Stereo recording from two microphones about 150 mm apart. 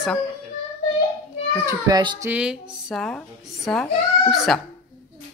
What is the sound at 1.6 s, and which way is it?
Speech, 25° right (ahead or behind).